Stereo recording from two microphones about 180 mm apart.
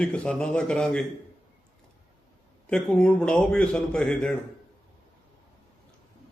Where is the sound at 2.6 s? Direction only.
5° left (ahead or behind).